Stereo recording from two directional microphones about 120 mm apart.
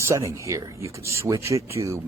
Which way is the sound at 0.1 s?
25° right (ahead or behind).